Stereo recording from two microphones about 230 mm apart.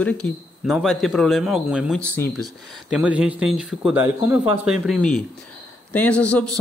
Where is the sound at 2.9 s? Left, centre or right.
Centre.